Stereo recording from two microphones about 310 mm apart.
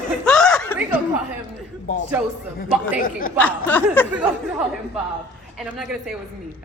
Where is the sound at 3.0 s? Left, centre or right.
Left.